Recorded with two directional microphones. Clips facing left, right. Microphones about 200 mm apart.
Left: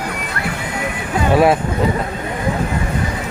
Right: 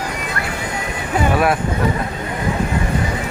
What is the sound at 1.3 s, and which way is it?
Speech, 25° left (ahead or behind).